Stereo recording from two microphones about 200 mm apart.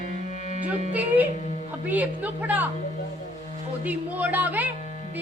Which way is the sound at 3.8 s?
10° right (ahead or behind).